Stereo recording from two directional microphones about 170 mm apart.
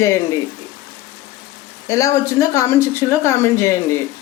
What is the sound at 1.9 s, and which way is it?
Speech, 20° left (ahead or behind).